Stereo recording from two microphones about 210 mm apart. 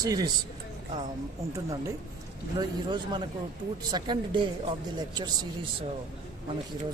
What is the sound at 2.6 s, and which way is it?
Speech, 20° right (ahead or behind).